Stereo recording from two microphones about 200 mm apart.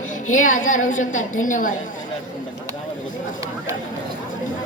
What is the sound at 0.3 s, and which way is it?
A woman's voice, 40° left (ahead or behind).